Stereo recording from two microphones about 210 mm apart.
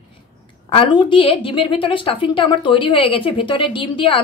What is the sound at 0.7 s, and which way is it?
A woman's voice, 20° left (ahead or behind).